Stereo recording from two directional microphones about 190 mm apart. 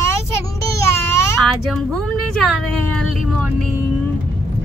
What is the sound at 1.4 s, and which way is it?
Speech, centre (ahead or behind).